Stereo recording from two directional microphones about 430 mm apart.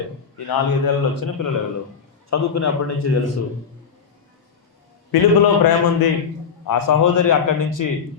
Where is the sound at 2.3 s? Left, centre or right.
Left.